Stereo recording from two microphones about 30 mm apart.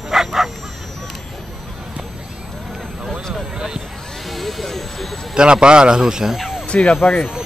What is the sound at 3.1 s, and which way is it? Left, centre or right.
Vehicle, centre.